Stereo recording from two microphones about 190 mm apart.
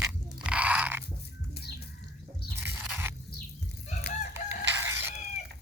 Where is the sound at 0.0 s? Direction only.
5° right (ahead or behind).